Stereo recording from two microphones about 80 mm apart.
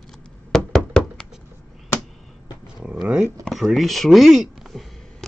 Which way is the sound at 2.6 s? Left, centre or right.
Centre.